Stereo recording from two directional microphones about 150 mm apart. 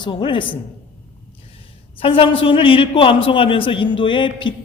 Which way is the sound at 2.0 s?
35° left (ahead or behind).